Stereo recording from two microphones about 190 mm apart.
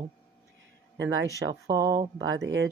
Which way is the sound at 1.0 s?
85° right.